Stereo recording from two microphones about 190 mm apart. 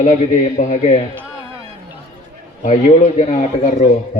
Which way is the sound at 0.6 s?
35° left (ahead or behind).